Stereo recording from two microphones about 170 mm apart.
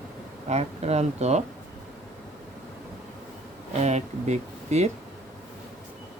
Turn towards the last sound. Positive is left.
turn(degrees=-40)  # may be behind; listen again after turning